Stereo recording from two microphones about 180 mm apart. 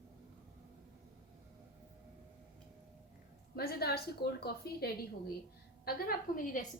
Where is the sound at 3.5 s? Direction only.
60° left (ahead or behind).